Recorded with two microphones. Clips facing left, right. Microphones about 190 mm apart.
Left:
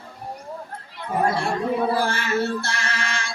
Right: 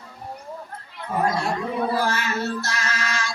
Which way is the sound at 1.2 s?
30° left (ahead or behind).